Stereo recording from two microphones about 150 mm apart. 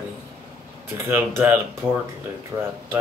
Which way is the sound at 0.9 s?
15° right (ahead or behind).